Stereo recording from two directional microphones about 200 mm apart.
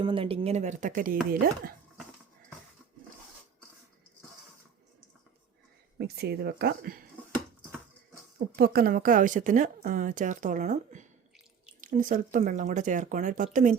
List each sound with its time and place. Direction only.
0.0 s speech: 25° right (ahead or behind); by 1.2 s 40° right (ahead or behind)
6.0 s speech: 55° right (ahead or behind)
8.5 s speech: 50° right (ahead or behind)